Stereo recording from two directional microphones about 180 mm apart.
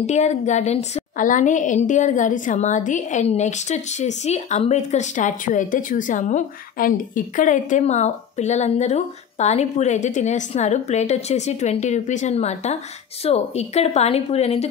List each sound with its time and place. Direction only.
0.0 s a woman's voice: 40° left (ahead or behind)